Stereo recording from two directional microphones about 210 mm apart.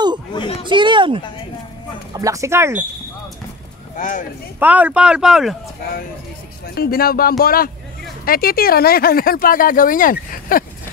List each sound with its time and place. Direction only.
0.3 s speech: 25° left (ahead or behind)
0.7 s speech: 20° right (ahead or behind)
3.9 s speech: 35° left (ahead or behind)
4.6 s speech: 5° right (ahead or behind)
6.7 s speech: 45° left (ahead or behind)